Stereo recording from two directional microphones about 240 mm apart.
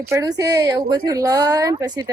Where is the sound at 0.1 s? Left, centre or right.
Centre.